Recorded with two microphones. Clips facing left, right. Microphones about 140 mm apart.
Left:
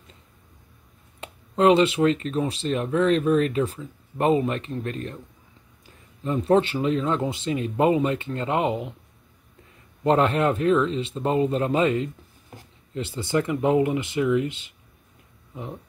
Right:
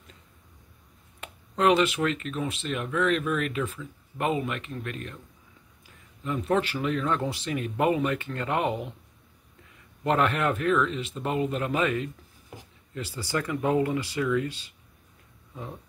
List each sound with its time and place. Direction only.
1.2 s speech: 30° left (ahead or behind)
10.0 s speech: 30° left (ahead or behind)